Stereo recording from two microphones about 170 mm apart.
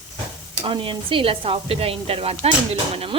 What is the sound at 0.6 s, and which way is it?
Speech, 30° right (ahead or behind).